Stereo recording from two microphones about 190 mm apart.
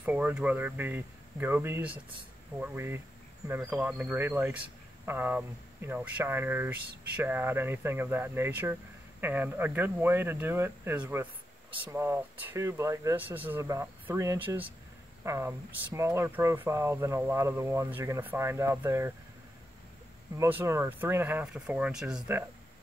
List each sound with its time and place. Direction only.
0.0 s speech: 10° right (ahead or behind)
20.3 s speech: 10° right (ahead or behind)